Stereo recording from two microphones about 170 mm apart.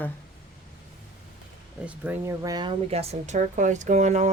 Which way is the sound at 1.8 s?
15° right (ahead or behind).